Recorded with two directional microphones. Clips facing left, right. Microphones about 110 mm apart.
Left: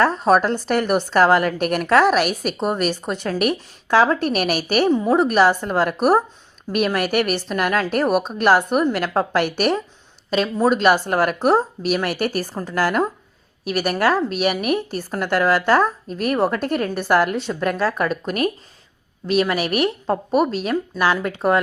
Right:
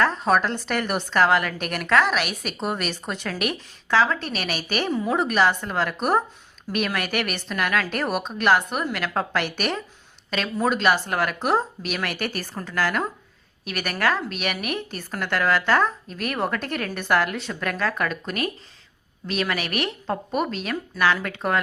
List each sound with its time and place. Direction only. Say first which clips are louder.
0.3 s a woman's voice: left 5 dB; 35° left (ahead or behind)
4.9 s speech: left 6 dB; 30° left (ahead or behind)
5.3 s a woman's voice: left 5 dB; 40° left (ahead or behind)
8.0 s a woman's voice: left 7 dB; centre (ahead or behind)
8.4 s a woman's voice: left 3 dB; 40° left (ahead or behind)
10.2 s a woman's voice: left 6 dB; 30° left (ahead or behind)
20.9 s speech: right 1 dB; 30° left (ahead or behind)